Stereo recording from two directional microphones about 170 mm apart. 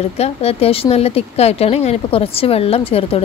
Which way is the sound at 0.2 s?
35° left (ahead or behind).